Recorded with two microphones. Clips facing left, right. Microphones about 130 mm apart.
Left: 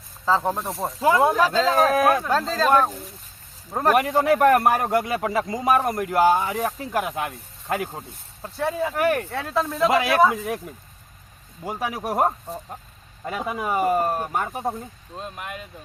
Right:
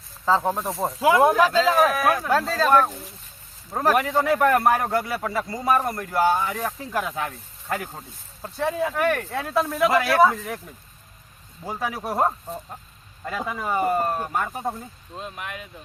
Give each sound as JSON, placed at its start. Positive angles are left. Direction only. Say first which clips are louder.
{"t": 0.3, "sound": "speech", "louder": "even", "side_deg": 0}
{"t": 1.1, "sound": "speech", "louder": "right 2 dB", "side_deg": -10}
{"t": 2.6, "sound": "a man's voice", "louder": "even", "side_deg": 10}
{"t": 9.3, "sound": "speech", "louder": "right 1 dB", "side_deg": -10}
{"t": 11.6, "sound": "a man's voice", "louder": "left 1 dB", "side_deg": 10}
{"t": 14.7, "sound": "speech", "louder": "left 2 dB", "side_deg": 0}